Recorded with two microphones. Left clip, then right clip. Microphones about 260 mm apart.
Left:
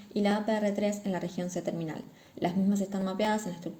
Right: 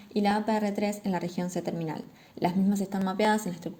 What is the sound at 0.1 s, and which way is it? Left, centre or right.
A woman's voice, right.